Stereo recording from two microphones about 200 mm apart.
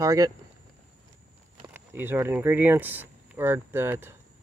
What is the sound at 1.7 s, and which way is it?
Speech, 10° right (ahead or behind).